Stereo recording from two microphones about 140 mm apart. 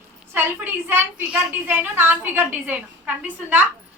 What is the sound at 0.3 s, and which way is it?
A woman's voice, 15° right (ahead or behind).